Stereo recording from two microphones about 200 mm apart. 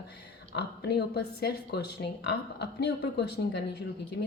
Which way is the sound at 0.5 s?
55° left (ahead or behind).